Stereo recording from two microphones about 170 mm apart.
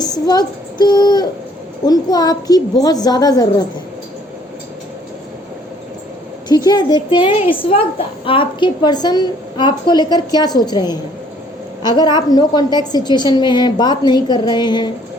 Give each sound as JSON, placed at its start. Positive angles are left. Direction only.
{"t": 0.0, "sound": "a woman's voice", "side_deg": 25}
{"t": 6.7, "sound": "a woman's voice", "side_deg": 25}